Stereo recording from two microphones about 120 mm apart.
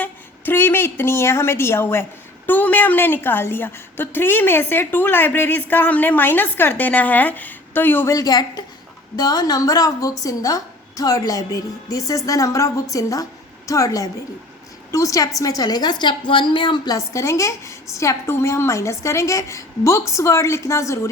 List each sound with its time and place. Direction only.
0.0 s a woman's voice: 15° left (ahead or behind)
8.1 s a woman's voice: 30° left (ahead or behind)
17.1 s a woman's voice: 25° left (ahead or behind)